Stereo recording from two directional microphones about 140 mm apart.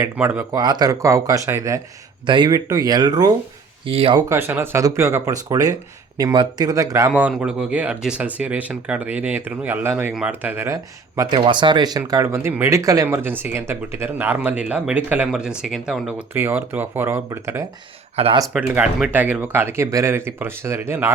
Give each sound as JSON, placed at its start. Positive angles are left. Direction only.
{"t": 0.0, "sound": "speech", "side_deg": -15}
{"t": 0.5, "sound": "speech", "side_deg": -30}
{"t": 2.2, "sound": "speech", "side_deg": -35}
{"t": 3.8, "sound": "speech", "side_deg": -40}
{"t": 4.3, "sound": "speech", "side_deg": -15}
{"t": 7.2, "sound": "speech", "side_deg": -10}
{"t": 11.3, "sound": "speech", "side_deg": -35}
{"t": 18.4, "sound": "speech", "side_deg": -10}